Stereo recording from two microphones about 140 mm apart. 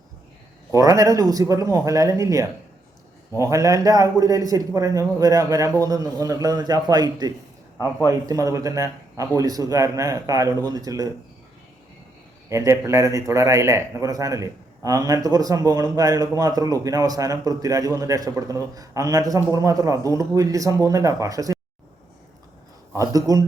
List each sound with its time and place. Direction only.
0.7 s a man's voice: 25° right (ahead or behind)
12.5 s a man's voice: 20° right (ahead or behind)
23.0 s a man's voice: 25° right (ahead or behind)